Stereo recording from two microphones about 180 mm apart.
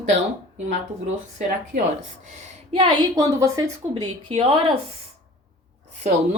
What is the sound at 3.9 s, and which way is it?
Speech, 30° right (ahead or behind).